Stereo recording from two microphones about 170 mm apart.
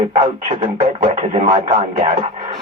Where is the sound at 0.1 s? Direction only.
40° right (ahead or behind).